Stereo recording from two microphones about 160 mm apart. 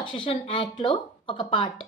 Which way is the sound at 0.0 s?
30° left (ahead or behind).